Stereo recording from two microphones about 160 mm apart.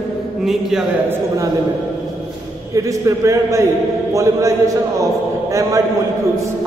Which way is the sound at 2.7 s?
20° right (ahead or behind).